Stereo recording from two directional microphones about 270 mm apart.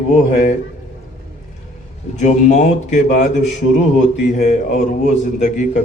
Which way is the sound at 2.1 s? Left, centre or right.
Left.